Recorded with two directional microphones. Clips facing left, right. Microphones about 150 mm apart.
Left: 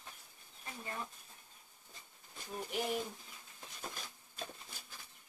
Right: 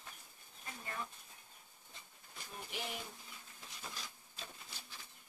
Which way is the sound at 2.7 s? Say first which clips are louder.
Left 8 dB; 45° left (ahead or behind).